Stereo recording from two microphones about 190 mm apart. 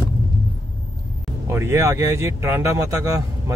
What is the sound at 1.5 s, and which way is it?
Speech, 15° right (ahead or behind).